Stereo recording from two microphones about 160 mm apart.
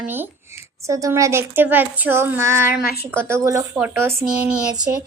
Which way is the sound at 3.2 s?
20° right (ahead or behind).